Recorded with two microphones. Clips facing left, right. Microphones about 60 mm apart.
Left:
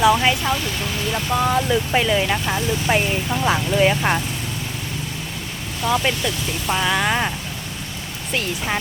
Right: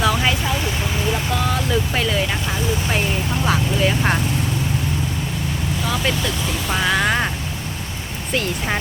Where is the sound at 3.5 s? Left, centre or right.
Centre.